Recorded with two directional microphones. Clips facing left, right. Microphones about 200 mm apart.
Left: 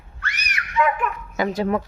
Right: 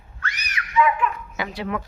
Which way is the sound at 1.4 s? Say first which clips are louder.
Left 7 dB; 45° left (ahead or behind).